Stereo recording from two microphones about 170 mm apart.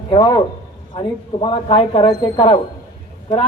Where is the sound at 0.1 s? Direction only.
25° left (ahead or behind).